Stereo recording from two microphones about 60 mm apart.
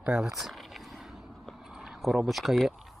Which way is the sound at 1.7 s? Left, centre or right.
Centre.